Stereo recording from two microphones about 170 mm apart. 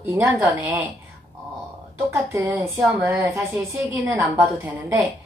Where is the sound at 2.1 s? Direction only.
15° right (ahead or behind).